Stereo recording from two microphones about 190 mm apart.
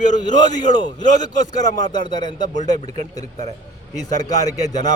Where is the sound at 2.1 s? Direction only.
25° left (ahead or behind).